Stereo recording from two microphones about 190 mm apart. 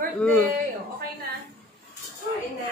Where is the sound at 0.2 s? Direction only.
5° left (ahead or behind).